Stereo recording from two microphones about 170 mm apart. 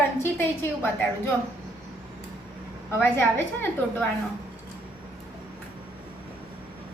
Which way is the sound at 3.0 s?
15° left (ahead or behind).